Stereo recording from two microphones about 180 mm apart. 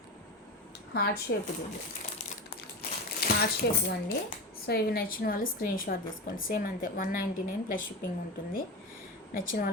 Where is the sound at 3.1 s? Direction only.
60° left (ahead or behind).